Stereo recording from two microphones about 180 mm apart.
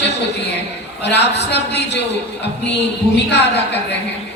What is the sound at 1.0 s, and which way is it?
Speech, 70° left (ahead or behind).